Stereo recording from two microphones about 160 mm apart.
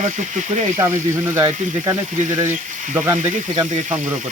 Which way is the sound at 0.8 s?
20° right (ahead or behind).